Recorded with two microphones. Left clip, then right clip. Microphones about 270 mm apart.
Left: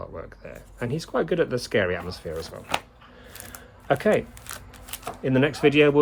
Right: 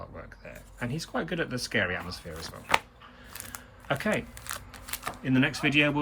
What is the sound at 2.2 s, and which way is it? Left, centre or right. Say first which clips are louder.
Speech: left 10 dB; left.